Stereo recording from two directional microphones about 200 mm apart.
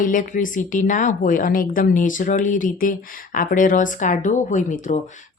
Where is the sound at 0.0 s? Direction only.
40° left (ahead or behind).